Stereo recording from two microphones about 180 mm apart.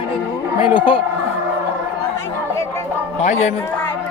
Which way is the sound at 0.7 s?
30° left (ahead or behind).